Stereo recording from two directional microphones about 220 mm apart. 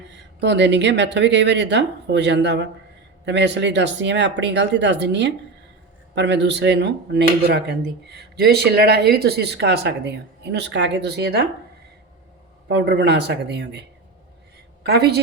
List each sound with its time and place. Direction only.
0.1 s speech: 50° right (ahead or behind)
12.6 s speech: 50° right (ahead or behind)
14.8 s speech: 45° right (ahead or behind)